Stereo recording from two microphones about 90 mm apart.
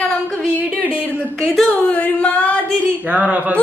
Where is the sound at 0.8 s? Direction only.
15° right (ahead or behind).